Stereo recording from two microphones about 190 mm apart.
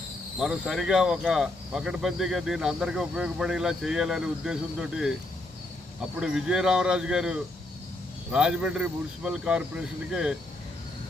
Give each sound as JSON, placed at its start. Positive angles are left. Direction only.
{"t": 0.3, "sound": "speech", "side_deg": -5}
{"t": 6.1, "sound": "speech", "side_deg": -5}